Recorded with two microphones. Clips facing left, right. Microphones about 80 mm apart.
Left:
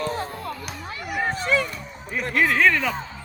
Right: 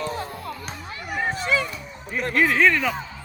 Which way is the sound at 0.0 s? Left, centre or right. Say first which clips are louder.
Left 2 dB; left.